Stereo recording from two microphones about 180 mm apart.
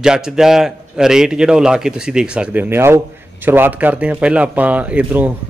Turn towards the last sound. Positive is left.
turn(degrees=-10)  # may be behind; listen again after turning